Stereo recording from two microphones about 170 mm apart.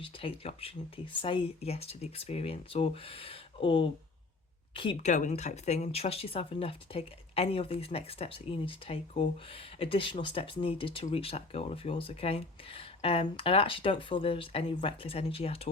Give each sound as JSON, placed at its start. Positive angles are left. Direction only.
{"t": 0.0, "sound": "speech", "side_deg": 35}
{"t": 5.0, "sound": "speech", "side_deg": 45}